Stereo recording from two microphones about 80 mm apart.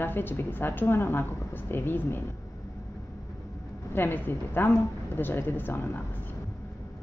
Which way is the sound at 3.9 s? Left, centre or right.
Left.